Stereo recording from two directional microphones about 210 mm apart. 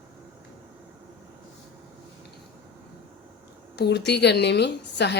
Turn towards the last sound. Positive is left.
turn(degrees=55)  # may be behind; listen again after turning